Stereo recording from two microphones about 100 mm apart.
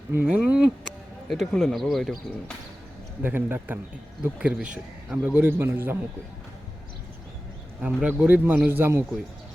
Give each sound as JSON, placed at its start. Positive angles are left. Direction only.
{"t": 0.3, "sound": "speech", "side_deg": -10}
{"t": 3.2, "sound": "a man's voice", "side_deg": -20}
{"t": 7.8, "sound": "a man's voice", "side_deg": -15}